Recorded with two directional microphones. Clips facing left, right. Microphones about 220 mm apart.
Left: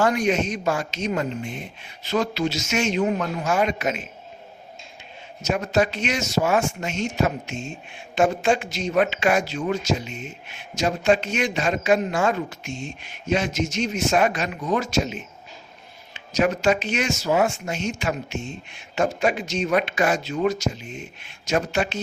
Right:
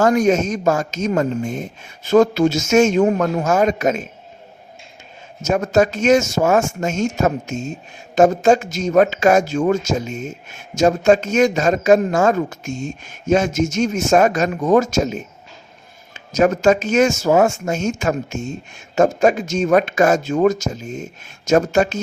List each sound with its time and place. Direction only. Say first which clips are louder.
0.0 s a man's voice: right 6 dB; 45° right (ahead or behind)
5.4 s a man's voice: right 6 dB; 45° right (ahead or behind)